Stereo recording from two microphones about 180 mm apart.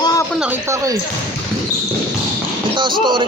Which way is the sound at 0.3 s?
10° right (ahead or behind).